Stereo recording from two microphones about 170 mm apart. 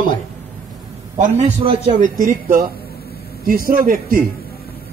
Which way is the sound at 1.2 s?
40° right (ahead or behind).